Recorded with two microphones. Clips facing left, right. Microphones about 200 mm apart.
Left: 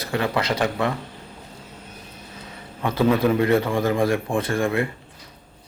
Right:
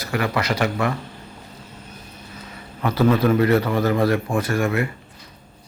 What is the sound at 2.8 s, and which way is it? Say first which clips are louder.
A man's voice: right 1 dB; 20° left (ahead or behind).